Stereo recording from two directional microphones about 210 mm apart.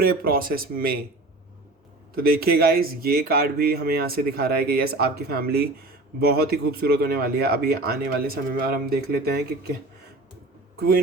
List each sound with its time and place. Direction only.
0.0 s speech: 45° right (ahead or behind)
2.1 s speech: 45° right (ahead or behind)